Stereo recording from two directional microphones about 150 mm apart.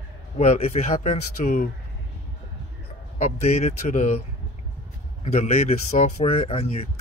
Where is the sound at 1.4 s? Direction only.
60° left (ahead or behind).